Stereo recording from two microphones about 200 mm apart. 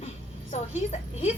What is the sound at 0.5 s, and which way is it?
Speech, 35° left (ahead or behind).